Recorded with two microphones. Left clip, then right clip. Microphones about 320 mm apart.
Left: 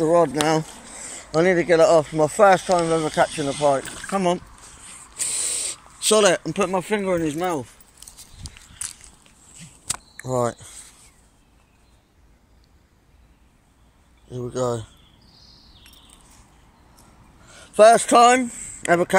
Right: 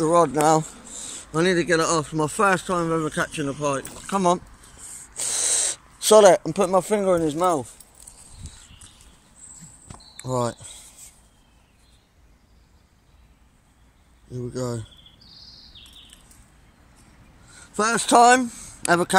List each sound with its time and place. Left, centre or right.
0.0 s speech: centre
1.3 s speech: centre
4.1 s speech: centre
5.2 s spray: right
6.5 s speech: centre
10.1 s speech: centre
14.3 s speech: centre
17.5 s a sound: centre
18.3 s a sound: right